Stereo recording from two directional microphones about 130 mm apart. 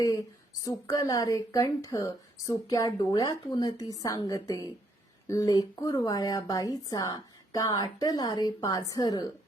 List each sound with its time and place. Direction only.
0.6 s a woman's voice: 25° left (ahead or behind)